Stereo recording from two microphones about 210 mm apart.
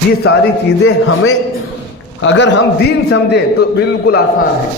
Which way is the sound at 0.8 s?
80° left.